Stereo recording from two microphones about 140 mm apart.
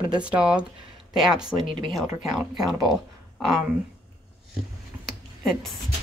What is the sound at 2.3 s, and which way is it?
Speech, centre (ahead or behind).